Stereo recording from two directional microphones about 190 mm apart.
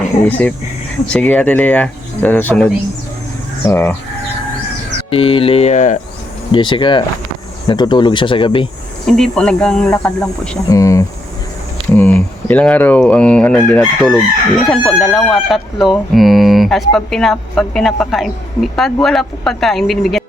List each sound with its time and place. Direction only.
0.2 s speech: 10° left (ahead or behind)
3.7 s speech: 15° left (ahead or behind)
5.1 s speech: 30° left (ahead or behind)
6.5 s speech: 25° left (ahead or behind)
9.0 s speech: centre (ahead or behind)
10.7 s speech: 15° left (ahead or behind); by 20.2 s centre (ahead or behind)